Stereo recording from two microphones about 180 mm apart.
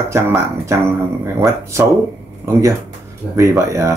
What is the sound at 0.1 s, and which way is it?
Speech, 15° right (ahead or behind).